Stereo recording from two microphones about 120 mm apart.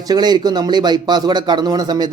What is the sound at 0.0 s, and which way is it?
Speech, 35° right (ahead or behind).